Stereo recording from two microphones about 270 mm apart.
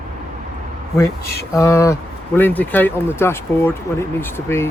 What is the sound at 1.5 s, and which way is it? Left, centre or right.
Speech, centre.